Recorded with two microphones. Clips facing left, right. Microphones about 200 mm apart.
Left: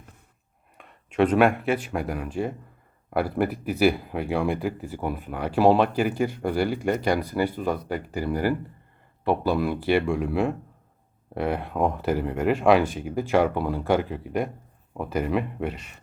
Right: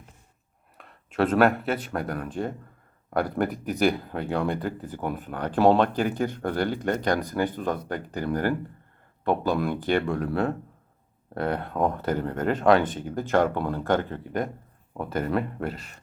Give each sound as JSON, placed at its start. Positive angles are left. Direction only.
{"t": 1.3, "sound": "speech", "side_deg": 5}